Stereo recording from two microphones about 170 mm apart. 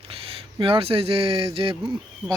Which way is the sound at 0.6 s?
35° right (ahead or behind).